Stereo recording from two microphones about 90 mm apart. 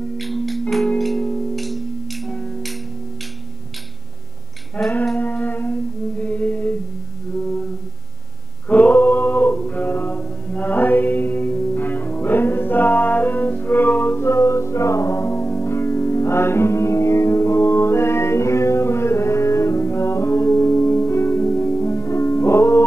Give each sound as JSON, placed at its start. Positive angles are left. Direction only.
{"t": 0.2, "sound": "music", "side_deg": 0}
{"t": 4.8, "sound": "music", "side_deg": 15}
{"t": 8.6, "sound": "a sound", "side_deg": 15}